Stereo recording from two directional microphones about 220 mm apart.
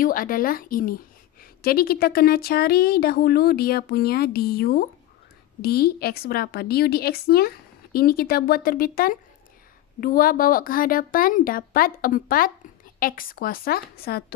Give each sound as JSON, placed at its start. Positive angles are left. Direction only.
{"t": 0.0, "sound": "a woman's voice", "side_deg": 40}